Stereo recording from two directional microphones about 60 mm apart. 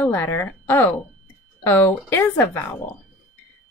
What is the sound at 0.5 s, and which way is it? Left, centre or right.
A woman's voice, left.